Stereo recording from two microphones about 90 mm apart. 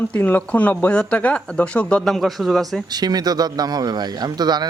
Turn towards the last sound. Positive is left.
turn(degrees=-50)  # may be behind; listen again after turning